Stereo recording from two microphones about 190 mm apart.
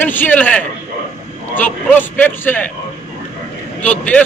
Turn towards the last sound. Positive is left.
turn(degrees=5)  # may be behind; listen again after turning